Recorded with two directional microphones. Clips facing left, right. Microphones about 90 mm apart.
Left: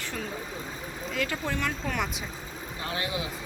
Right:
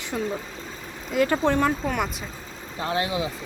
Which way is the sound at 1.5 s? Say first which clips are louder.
Right 10 dB; 65° right (ahead or behind).